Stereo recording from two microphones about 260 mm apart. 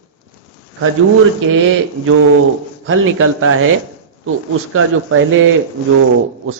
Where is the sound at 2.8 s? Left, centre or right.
Right.